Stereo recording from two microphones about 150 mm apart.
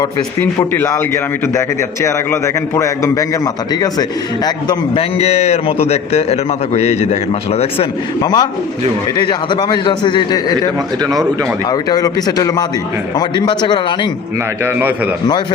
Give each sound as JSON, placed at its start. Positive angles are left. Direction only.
{"t": 0.0, "sound": "a man's voice", "side_deg": 15}
{"t": 4.9, "sound": "a man's voice", "side_deg": 45}
{"t": 8.2, "sound": "a man's voice", "side_deg": 25}
{"t": 11.0, "sound": "speech", "side_deg": -25}
{"t": 11.7, "sound": "a man's voice", "side_deg": 25}
{"t": 14.6, "sound": "a man's voice", "side_deg": -15}